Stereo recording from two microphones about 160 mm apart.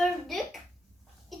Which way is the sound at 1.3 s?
Centre (ahead or behind).